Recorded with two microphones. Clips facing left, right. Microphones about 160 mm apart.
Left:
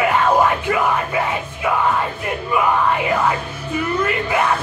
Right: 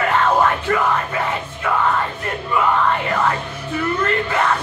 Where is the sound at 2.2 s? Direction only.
10° left (ahead or behind).